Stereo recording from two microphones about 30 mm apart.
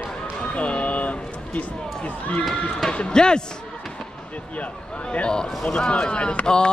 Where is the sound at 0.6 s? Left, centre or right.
Left.